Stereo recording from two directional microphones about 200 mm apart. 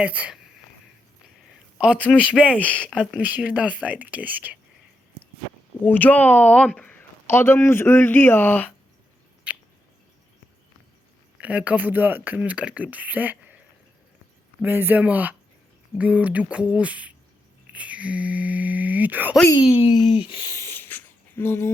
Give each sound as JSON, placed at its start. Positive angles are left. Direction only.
{"t": 0.0, "sound": "speech", "side_deg": -5}
{"t": 1.5, "sound": "a sound", "side_deg": -5}
{"t": 2.1, "sound": "speech", "side_deg": -5}
{"t": 2.5, "sound": "speech", "side_deg": 5}
{"t": 3.2, "sound": "speech", "side_deg": -5}
{"t": 5.8, "sound": "speech", "side_deg": 10}
{"t": 9.5, "sound": "drip", "side_deg": -5}
{"t": 11.3, "sound": "speech", "side_deg": -5}
{"t": 14.6, "sound": "speech", "side_deg": -10}
{"t": 19.5, "sound": "speech", "side_deg": 25}
{"t": 20.0, "sound": "a sound", "side_deg": 30}